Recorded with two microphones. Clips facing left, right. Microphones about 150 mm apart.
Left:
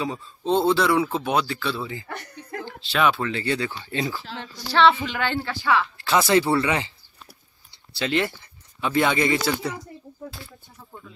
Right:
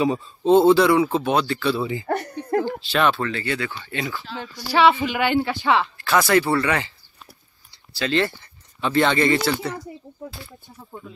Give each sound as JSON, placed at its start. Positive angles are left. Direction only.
{"t": 0.0, "sound": "a man's voice", "side_deg": -20}
{"t": 0.6, "sound": "a man's voice", "side_deg": -5}
{"t": 1.8, "sound": "a woman's voice", "side_deg": -20}
{"t": 2.0, "sound": "a sound", "side_deg": -55}
{"t": 2.9, "sound": "a man's voice", "side_deg": 5}
{"t": 3.3, "sound": "speech", "side_deg": 25}
{"t": 4.6, "sound": "a woman's voice", "side_deg": -5}
{"t": 5.9, "sound": "speech", "side_deg": 25}
{"t": 7.9, "sound": "speech", "side_deg": 20}
{"t": 11.1, "sound": "speech", "side_deg": -20}